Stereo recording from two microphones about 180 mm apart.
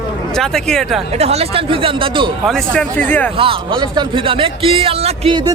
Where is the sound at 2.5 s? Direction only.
5° left (ahead or behind).